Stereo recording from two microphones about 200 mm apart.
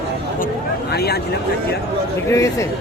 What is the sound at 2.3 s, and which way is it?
Speech, 15° left (ahead or behind).